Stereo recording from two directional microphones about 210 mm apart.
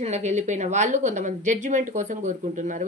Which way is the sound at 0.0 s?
30° right (ahead or behind).